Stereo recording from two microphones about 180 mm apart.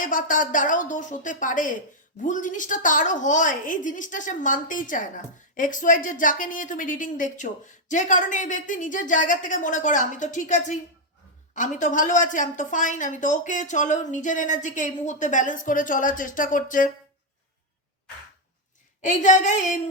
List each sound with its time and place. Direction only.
0.0 s a woman's voice: 50° left (ahead or behind)
19.0 s a woman's voice: 40° left (ahead or behind)